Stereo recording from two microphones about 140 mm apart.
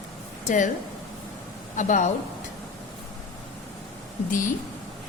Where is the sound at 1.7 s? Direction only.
60° left (ahead or behind).